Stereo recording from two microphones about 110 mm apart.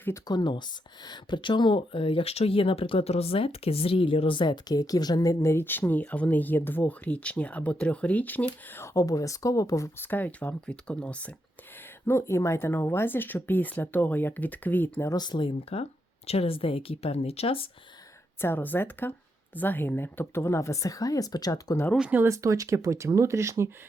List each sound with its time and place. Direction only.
0.3 s speech: 45° left (ahead or behind); by 11.3 s 10° left (ahead or behind)
11.8 s speech: 25° left (ahead or behind)
15.1 s speech: 40° left (ahead or behind); by 17.7 s 60° left (ahead or behind)
18.3 s speech: 20° left (ahead or behind)
21.9 s speech: 10° right (ahead or behind)
22.2 s speech: 30° right (ahead or behind)